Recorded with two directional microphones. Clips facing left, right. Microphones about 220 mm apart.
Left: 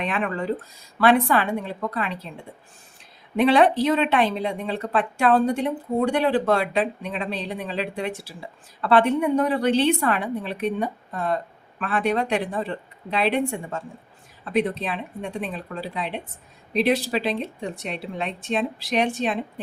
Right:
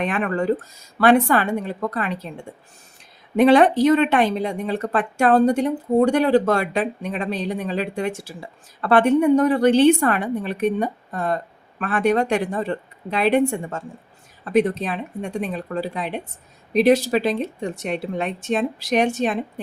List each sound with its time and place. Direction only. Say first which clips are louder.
0.0 s speech: right 4 dB; 45° right (ahead or behind)
3.3 s speech: right 4 dB; 45° right (ahead or behind)